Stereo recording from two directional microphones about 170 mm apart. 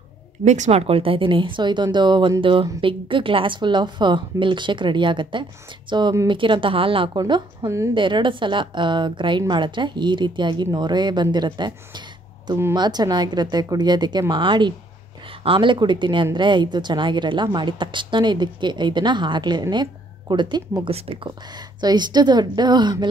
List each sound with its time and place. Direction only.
0.5 s a woman's voice: 40° right (ahead or behind)